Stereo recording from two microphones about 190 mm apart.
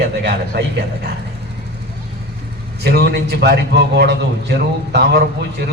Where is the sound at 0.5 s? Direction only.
60° right (ahead or behind).